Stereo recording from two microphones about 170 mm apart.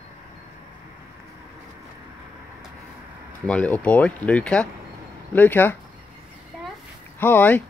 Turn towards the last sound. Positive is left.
turn(degrees=10)  # may be behind; listen again after turning